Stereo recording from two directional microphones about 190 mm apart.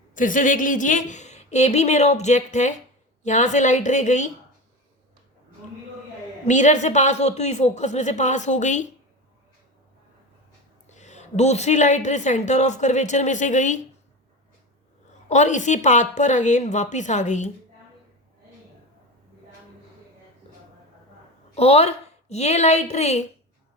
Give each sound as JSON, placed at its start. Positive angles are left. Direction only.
{"t": 0.1, "sound": "a woman's voice", "side_deg": 45}
{"t": 6.4, "sound": "a woman's voice", "side_deg": 40}
{"t": 10.8, "sound": "a woman's voice", "side_deg": 40}
{"t": 15.3, "sound": "a woman's voice", "side_deg": 40}
{"t": 21.5, "sound": "a woman's voice", "side_deg": 35}